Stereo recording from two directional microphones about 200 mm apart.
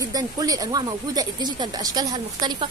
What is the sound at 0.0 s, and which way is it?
Speech, 20° right (ahead or behind).